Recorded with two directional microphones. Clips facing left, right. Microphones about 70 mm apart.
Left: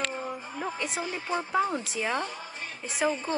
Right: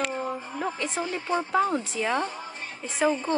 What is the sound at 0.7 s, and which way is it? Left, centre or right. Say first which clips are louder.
A woman's voice: right 3 dB; centre.